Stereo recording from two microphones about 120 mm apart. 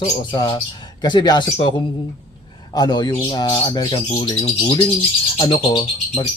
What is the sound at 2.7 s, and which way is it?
Speech, 35° left (ahead or behind).